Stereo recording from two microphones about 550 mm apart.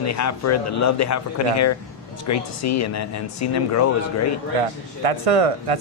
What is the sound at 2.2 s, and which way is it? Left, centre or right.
Speech, left.